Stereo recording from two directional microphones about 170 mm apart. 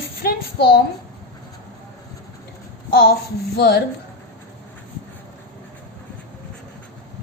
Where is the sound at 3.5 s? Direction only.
70° left (ahead or behind).